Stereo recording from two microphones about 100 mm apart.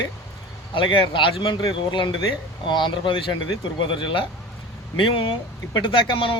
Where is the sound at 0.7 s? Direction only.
60° left (ahead or behind).